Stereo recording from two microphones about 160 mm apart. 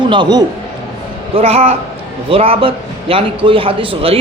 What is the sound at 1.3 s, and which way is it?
A man's voice, 40° right (ahead or behind).